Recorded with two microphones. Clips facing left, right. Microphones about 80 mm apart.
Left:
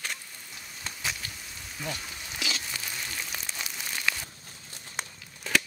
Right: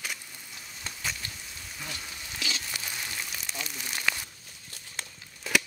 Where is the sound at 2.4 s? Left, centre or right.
Centre.